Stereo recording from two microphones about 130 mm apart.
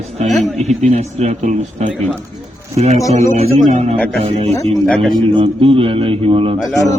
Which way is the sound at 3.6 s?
60° right (ahead or behind).